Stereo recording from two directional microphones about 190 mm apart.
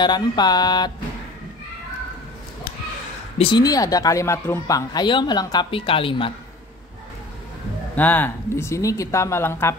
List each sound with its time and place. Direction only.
0.0 s a woman's voice: 20° left (ahead or behind)
3.3 s a woman's voice: 20° left (ahead or behind)
7.9 s speech: 10° left (ahead or behind)